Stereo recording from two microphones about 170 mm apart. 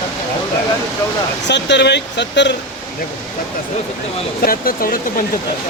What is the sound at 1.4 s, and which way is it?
Speech, 90° left.